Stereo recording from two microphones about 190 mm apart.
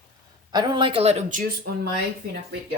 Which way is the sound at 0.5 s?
25° right (ahead or behind).